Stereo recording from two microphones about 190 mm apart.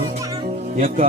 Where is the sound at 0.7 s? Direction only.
45° right (ahead or behind).